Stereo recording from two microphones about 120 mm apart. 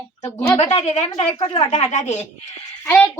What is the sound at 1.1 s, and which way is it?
Speech, 55° left (ahead or behind).